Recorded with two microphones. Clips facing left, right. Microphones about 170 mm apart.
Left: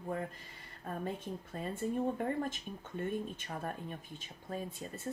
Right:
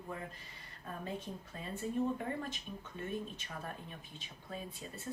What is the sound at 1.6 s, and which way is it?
Speech, 50° left (ahead or behind).